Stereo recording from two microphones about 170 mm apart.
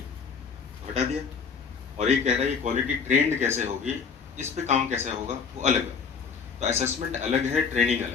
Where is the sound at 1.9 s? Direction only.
40° right (ahead or behind).